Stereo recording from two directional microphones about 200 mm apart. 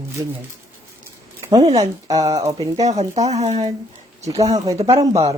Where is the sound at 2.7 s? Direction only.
35° right (ahead or behind).